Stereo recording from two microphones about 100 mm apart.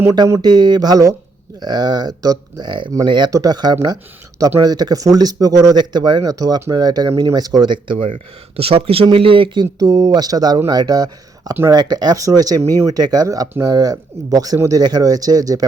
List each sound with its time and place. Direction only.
0.4 s speech: 45° right (ahead or behind)
8.5 s speech: 70° right (ahead or behind)
9.1 s speech: 60° right (ahead or behind)
9.7 s speech: 35° right (ahead or behind)